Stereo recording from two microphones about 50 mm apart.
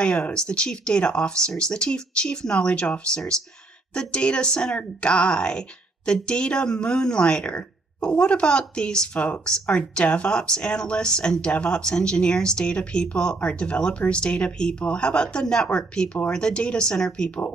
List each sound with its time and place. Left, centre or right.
0.0 s speech: left